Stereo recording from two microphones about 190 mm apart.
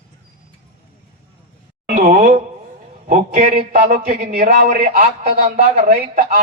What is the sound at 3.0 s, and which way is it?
Speech, 45° right (ahead or behind).